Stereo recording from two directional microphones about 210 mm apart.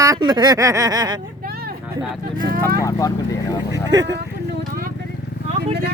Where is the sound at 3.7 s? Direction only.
20° right (ahead or behind).